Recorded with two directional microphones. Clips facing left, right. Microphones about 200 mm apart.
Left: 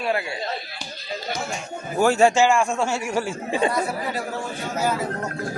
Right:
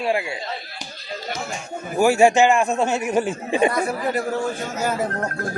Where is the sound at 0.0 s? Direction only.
25° right (ahead or behind).